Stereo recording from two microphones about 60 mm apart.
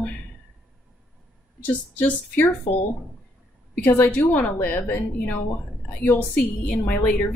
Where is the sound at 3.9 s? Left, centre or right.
Left.